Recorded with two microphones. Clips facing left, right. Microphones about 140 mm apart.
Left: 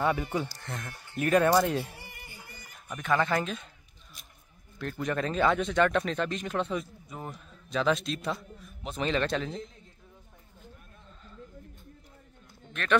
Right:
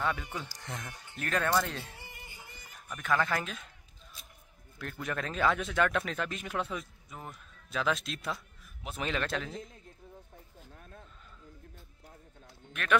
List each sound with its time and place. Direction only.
0.0 s speech: 15° left (ahead or behind)
0.5 s speech: 15° right (ahead or behind)
1.2 s speech: 15° left (ahead or behind)
2.0 s music: 20° right (ahead or behind)
2.9 s speech: centre (ahead or behind)
4.7 s speech: centre (ahead or behind)